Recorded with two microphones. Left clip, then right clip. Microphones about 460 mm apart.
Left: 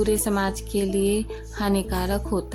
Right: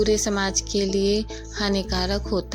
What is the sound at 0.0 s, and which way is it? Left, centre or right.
Music, left.